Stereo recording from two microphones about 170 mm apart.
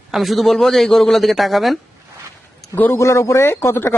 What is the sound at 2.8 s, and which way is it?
A man's voice, 15° left (ahead or behind).